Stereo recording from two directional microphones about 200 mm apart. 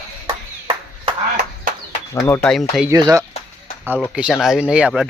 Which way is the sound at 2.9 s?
15° right (ahead or behind).